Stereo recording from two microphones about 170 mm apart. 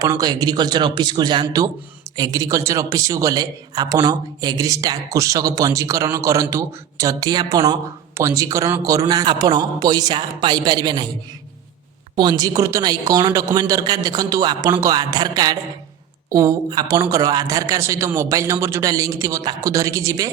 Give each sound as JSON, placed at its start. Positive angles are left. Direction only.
{"t": 0.0, "sound": "speech", "side_deg": -20}
{"t": 12.1, "sound": "speech", "side_deg": -25}